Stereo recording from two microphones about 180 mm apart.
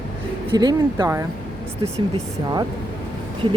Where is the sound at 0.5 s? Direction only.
20° right (ahead or behind).